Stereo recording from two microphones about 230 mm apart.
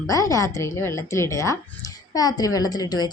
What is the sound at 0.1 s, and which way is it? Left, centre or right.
A woman's voice, centre.